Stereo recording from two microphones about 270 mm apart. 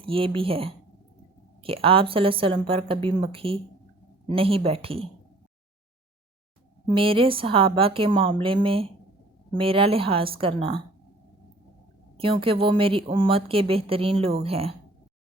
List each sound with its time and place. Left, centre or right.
0.0 s a woman's voice: centre
6.9 s a woman's voice: centre
12.2 s a woman's voice: centre